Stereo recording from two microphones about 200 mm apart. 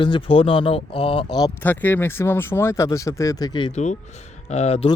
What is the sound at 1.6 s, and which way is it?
Speech, 10° left (ahead or behind).